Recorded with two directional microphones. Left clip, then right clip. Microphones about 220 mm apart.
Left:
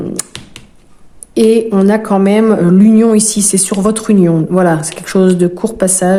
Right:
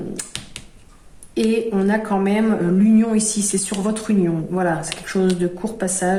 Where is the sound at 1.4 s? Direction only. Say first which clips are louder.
Left 10 dB; 50° left (ahead or behind).